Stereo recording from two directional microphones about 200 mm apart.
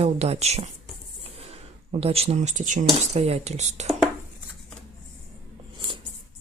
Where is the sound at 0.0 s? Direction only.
30° right (ahead or behind).